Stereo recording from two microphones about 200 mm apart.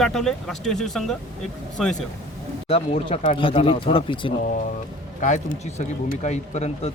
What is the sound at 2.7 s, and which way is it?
Speech, 30° left (ahead or behind).